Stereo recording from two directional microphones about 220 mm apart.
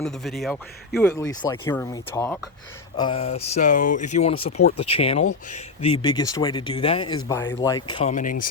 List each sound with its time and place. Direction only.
0.0 s a man's voice: centre (ahead or behind)
3.0 s speech: 25° left (ahead or behind)
7.3 s speech: 15° left (ahead or behind)
8.1 s speech: 35° left (ahead or behind)